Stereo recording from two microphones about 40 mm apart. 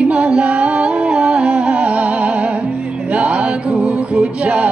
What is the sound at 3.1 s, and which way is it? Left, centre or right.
Male singing, right.